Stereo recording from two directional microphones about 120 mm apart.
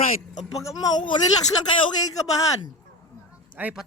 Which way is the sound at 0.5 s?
30° left (ahead or behind).